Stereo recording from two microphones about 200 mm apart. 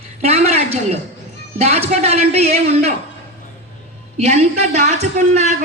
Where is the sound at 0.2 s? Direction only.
30° right (ahead or behind).